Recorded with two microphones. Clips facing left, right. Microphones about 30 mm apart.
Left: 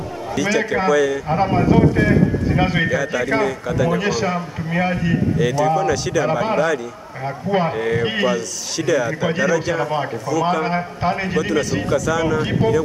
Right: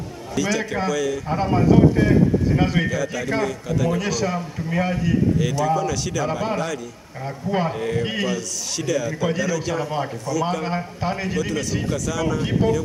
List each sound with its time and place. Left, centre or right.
0.4 s a man's voice: centre
2.9 s a man's voice: centre
5.4 s a man's voice: centre